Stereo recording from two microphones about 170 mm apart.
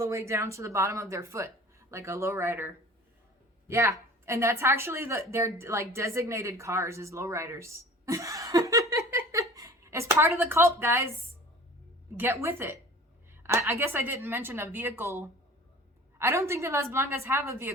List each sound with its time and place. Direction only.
0.0 s a woman's voice: 15° right (ahead or behind)
12.1 s speech: 15° right (ahead or behind)